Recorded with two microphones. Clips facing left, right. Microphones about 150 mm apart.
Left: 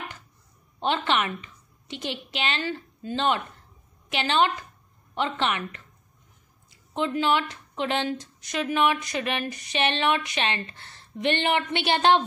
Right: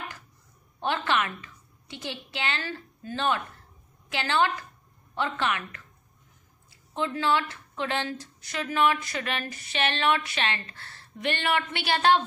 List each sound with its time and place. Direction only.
0.7 s a woman's voice: 20° left (ahead or behind)